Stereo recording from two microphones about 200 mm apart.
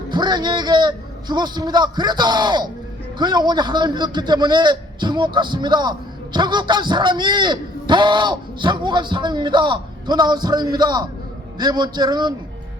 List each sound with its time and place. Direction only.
0.1 s a man's voice: 20° right (ahead or behind)